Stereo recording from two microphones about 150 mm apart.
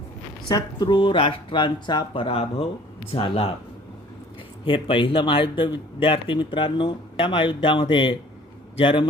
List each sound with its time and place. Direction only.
0.4 s a man's voice: 25° left (ahead or behind)
4.6 s a man's voice: 35° left (ahead or behind)